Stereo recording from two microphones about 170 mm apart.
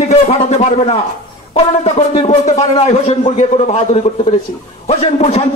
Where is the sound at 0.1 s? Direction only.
40° left (ahead or behind).